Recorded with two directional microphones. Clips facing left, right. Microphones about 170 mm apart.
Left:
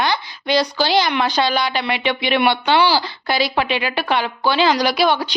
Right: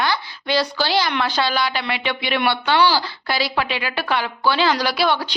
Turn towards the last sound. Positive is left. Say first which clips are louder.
# left 3 dB
turn(degrees=15)  # may be behind; listen again after turning